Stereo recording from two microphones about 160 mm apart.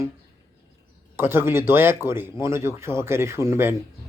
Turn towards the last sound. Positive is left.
turn(degrees=-15)  # may be behind; listen again after turning